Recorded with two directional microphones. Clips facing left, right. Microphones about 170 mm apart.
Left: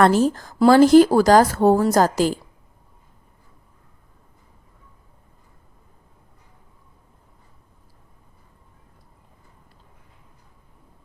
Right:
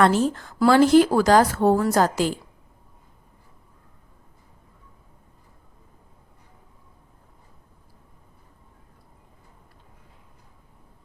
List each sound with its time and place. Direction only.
0.0 s speech: 40° left (ahead or behind)